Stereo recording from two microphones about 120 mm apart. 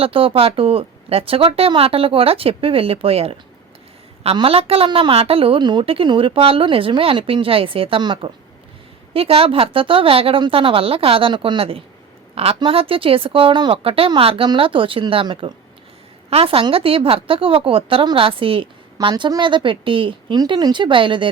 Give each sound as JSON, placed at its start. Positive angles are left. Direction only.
{"t": 0.0, "sound": "a woman's voice", "side_deg": -50}
{"t": 4.4, "sound": "a woman's voice", "side_deg": -50}